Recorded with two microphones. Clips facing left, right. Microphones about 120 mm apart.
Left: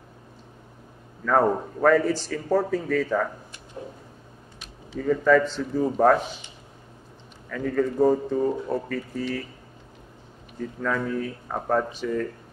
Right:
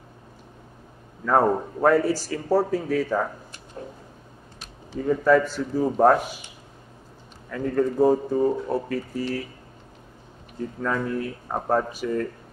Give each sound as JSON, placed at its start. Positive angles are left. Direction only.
{"t": 1.2, "sound": "a man's voice", "side_deg": -10}
{"t": 3.8, "sound": "a sound", "side_deg": 10}
{"t": 4.9, "sound": "a man's voice", "side_deg": -15}
{"t": 7.4, "sound": "a man's voice", "side_deg": -10}
{"t": 10.8, "sound": "speech", "side_deg": -5}
{"t": 11.4, "sound": "a man's voice", "side_deg": -15}